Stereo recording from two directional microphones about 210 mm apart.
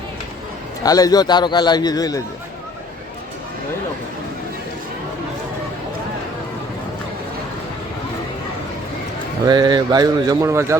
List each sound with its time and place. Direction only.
0.8 s a man's voice: 15° left (ahead or behind)
9.5 s speech: 20° right (ahead or behind)